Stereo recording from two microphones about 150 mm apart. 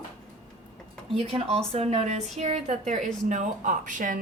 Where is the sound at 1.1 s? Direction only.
40° right (ahead or behind).